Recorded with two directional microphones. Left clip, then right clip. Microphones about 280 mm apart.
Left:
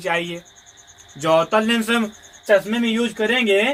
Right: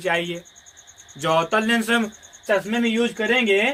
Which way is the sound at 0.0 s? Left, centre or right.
Centre.